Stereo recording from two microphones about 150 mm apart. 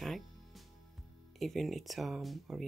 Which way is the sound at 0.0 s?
Centre (ahead or behind).